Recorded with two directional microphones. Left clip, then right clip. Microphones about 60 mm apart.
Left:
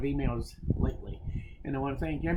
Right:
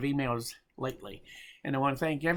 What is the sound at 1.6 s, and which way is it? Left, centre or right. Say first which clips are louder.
Speech: right 5 dB; right.